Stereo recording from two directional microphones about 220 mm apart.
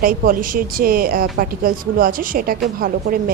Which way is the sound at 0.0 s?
40° right (ahead or behind).